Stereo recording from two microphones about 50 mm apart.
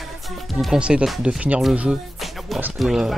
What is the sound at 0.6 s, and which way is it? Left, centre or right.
Speech, centre.